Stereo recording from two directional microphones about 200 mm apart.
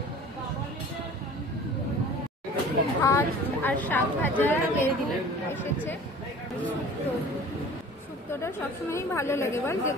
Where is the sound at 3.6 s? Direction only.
10° left (ahead or behind).